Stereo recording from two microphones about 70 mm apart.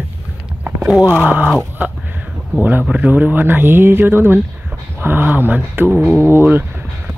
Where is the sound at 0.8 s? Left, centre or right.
Centre.